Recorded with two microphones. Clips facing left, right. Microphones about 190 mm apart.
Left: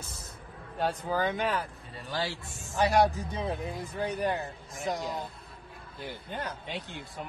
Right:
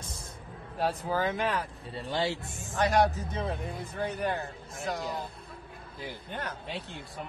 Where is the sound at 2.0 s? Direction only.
25° right (ahead or behind).